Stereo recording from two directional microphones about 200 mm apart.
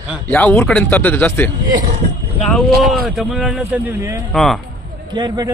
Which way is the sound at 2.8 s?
Centre (ahead or behind).